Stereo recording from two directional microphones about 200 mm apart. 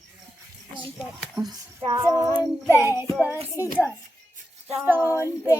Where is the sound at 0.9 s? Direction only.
Centre (ahead or behind).